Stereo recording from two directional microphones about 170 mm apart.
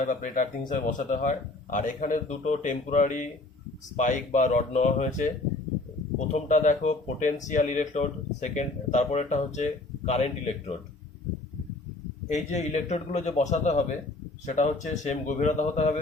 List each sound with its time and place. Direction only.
0.0 s speech: 50° left (ahead or behind)
12.3 s speech: 45° left (ahead or behind)